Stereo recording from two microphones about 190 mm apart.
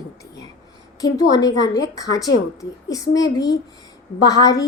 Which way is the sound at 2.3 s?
70° left (ahead or behind).